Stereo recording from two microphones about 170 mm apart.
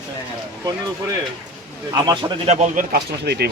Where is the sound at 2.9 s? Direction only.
75° right (ahead or behind).